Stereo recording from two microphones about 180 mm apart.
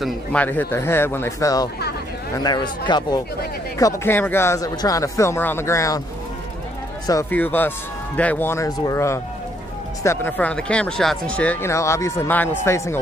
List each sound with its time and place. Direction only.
0.0 s a man's voice: 10° left (ahead or behind)
7.1 s speech: 15° left (ahead or behind)